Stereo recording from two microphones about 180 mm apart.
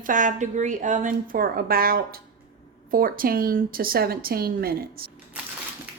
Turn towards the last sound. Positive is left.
turn(degrees=-55)  # may be behind; listen again after turning